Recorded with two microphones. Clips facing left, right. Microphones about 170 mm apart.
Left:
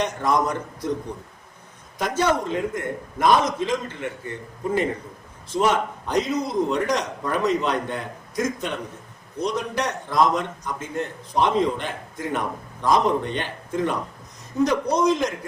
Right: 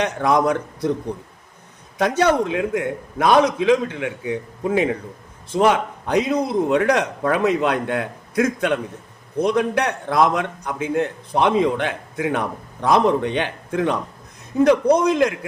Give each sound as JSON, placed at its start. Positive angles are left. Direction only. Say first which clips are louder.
{"t": 0.0, "sound": "a man's voice", "louder": "right 4 dB", "side_deg": -65}
{"t": 2.0, "sound": "a man's voice", "louder": "right 5 dB", "side_deg": -65}
{"t": 5.5, "sound": "a man's voice", "louder": "right 4 dB", "side_deg": -60}